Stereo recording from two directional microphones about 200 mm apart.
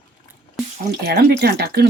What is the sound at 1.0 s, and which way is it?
Speech, 55° right (ahead or behind).